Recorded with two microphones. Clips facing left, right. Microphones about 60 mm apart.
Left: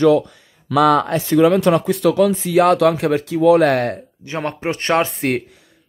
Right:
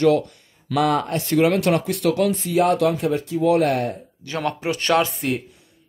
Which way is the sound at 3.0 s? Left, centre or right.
Left.